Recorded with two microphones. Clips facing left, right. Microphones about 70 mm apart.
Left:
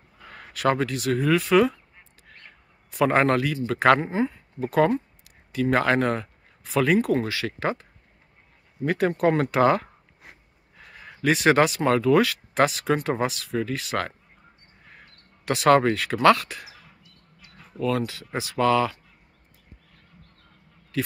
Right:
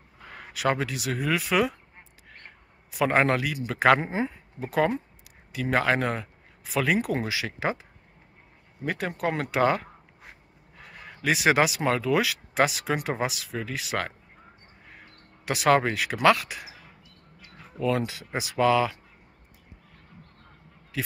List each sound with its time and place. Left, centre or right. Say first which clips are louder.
0.3 s speech: left 3 dB; centre
2.9 s speech: left 2 dB; centre
4.0 s speech: left 3 dB; centre
4.6 s speech: left 4 dB; centre
8.8 s speech: left 7 dB; centre
11.0 s speech: left 3 dB; centre
15.4 s speech: left 3 dB; centre
17.6 s a sound: left 1 dB; centre
17.9 s speech: left 1 dB; centre
20.9 s a man's voice: left 5 dB; centre